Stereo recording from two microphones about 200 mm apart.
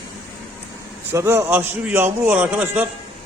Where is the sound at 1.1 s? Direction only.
15° right (ahead or behind).